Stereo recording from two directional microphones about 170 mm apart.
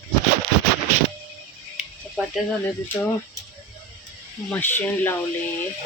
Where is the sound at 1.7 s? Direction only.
5° right (ahead or behind).